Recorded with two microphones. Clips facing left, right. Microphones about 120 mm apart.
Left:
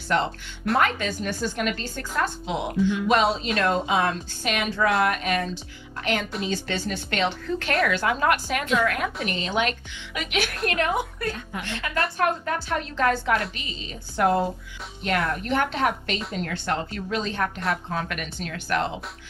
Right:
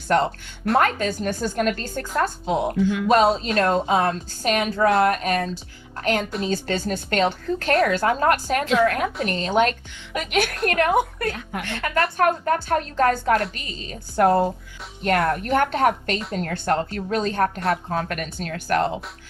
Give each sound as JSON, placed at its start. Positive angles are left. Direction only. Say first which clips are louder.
{"t": 0.1, "sound": "a woman's voice", "louder": "right 4 dB", "side_deg": -45}